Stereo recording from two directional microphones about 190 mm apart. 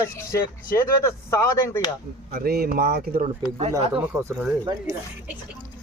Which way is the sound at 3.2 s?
35° right (ahead or behind).